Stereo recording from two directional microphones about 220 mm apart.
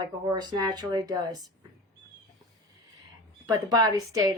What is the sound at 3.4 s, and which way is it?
Speech, 20° right (ahead or behind).